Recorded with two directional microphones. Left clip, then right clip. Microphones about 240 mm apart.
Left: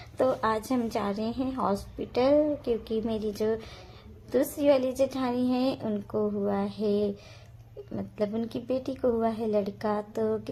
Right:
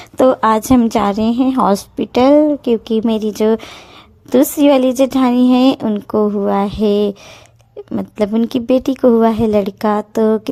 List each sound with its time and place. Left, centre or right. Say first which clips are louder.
0.2 s a woman's voice: right 15 dB; right